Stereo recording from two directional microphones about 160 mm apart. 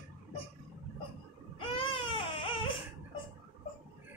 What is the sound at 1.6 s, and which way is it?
Baby cry, 35° left (ahead or behind).